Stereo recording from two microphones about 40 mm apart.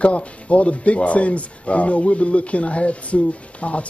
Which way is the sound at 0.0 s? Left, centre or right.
Left.